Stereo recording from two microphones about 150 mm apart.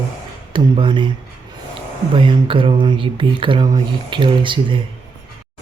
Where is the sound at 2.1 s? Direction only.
35° right (ahead or behind).